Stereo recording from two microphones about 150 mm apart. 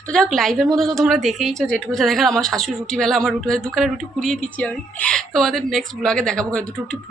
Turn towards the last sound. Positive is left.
turn(degrees=5)  # may be behind; listen again after turning